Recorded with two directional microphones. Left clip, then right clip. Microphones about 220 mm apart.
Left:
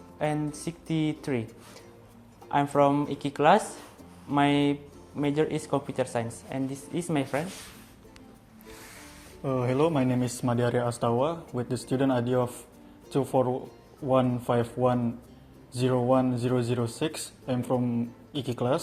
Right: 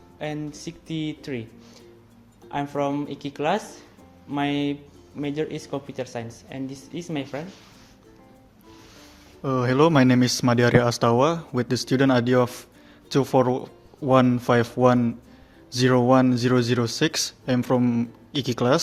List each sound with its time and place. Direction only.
0.2 s speech: centre (ahead or behind)
2.5 s speech: centre (ahead or behind)
9.4 s speech: 30° right (ahead or behind)